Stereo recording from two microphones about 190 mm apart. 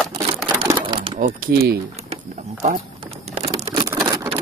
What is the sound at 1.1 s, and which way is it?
Speech, 45° right (ahead or behind).